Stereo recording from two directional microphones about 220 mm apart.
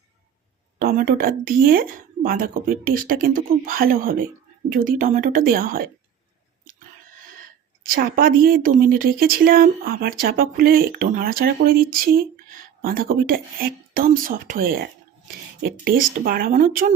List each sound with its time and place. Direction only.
0.8 s speech: 40° right (ahead or behind)
7.9 s speech: 40° right (ahead or behind)